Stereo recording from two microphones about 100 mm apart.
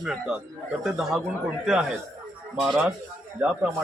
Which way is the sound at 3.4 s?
15° right (ahead or behind).